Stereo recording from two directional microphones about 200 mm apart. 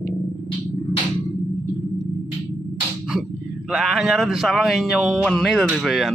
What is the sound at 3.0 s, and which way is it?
Speech, centre (ahead or behind).